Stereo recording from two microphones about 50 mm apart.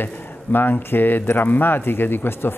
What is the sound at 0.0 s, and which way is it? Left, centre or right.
Speech, left.